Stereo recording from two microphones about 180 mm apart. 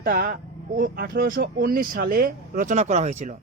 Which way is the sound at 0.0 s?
50° right (ahead or behind).